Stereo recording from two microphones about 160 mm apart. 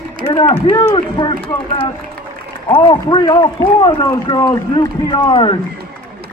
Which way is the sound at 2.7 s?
30° left (ahead or behind).